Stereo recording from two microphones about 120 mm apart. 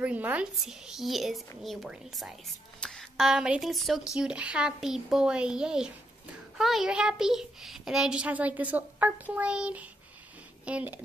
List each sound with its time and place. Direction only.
0.0 s a child's voice: 10° right (ahead or behind)